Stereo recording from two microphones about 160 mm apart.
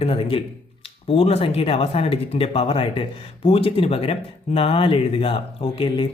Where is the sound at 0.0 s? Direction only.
35° left (ahead or behind).